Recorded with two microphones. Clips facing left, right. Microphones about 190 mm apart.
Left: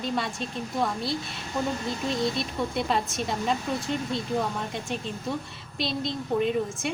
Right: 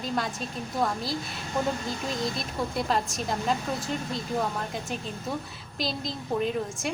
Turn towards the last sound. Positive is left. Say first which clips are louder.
# left 3 dB
turn(degrees=0)  # may be behind; listen again after turning